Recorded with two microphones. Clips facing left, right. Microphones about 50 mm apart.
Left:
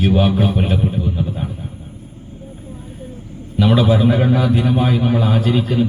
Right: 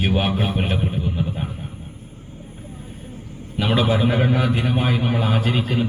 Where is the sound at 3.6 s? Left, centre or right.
Right.